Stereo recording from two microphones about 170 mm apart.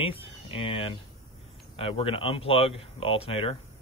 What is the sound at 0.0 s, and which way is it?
Speech, 35° left (ahead or behind).